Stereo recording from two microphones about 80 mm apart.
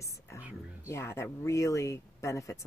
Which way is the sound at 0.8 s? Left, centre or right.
Left.